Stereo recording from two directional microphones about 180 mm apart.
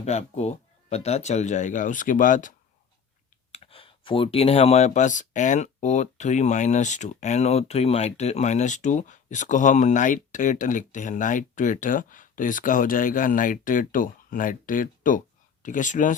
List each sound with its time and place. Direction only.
0.0 s speech: 40° left (ahead or behind)
3.5 s speech: 30° left (ahead or behind)